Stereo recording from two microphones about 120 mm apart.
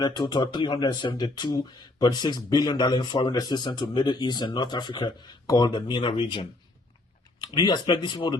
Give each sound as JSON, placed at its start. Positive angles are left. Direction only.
{"t": 0.0, "sound": "speech", "side_deg": 35}